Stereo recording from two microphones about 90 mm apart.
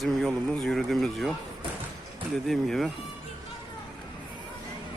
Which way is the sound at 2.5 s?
5° left (ahead or behind).